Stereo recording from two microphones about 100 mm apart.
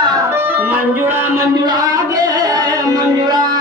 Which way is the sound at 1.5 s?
45° right (ahead or behind).